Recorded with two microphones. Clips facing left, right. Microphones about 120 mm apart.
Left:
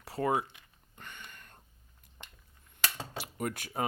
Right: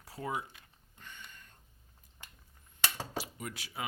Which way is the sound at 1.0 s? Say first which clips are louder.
Left 3 dB; 65° left (ahead or behind).